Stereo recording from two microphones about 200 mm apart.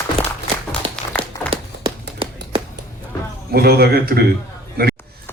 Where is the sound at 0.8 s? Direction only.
25° right (ahead or behind).